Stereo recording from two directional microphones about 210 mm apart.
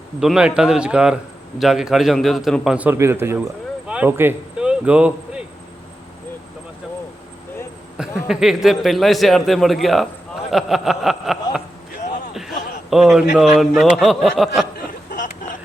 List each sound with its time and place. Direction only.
0.2 s a man's voice: 5° right (ahead or behind)
7.9 s a man's voice: 5° right (ahead or behind)
10.5 s a sound: centre (ahead or behind)
13.3 s a man's voice: centre (ahead or behind)
15.1 s vehicle: 40° left (ahead or behind)